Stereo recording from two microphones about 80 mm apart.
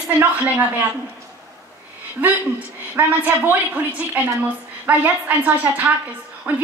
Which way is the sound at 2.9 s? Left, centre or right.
Right.